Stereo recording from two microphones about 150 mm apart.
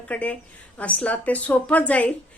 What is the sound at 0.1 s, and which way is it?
Speech, 10° left (ahead or behind).